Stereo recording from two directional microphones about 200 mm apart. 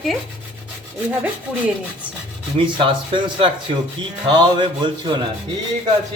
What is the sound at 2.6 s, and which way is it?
Speech, 25° right (ahead or behind).